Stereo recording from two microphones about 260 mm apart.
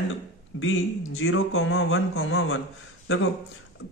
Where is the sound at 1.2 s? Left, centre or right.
Left.